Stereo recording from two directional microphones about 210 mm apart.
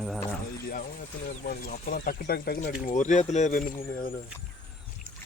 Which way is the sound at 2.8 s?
35° left (ahead or behind).